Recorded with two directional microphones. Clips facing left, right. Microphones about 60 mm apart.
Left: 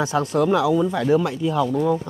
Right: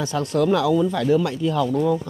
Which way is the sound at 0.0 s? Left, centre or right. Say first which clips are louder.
Left 1 dB; centre.